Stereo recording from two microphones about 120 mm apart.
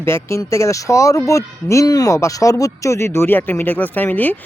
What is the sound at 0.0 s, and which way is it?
Speech, 20° left (ahead or behind).